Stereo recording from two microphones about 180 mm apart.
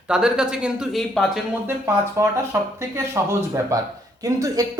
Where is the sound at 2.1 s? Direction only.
15° right (ahead or behind).